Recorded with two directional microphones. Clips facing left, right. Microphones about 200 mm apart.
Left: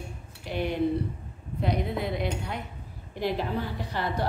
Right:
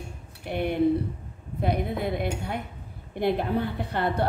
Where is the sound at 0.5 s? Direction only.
55° right (ahead or behind).